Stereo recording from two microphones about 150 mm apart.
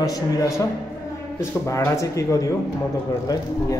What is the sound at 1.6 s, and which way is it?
Speech, 20° left (ahead or behind).